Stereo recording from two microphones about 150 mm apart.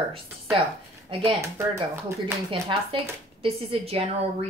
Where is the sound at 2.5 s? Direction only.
40° right (ahead or behind).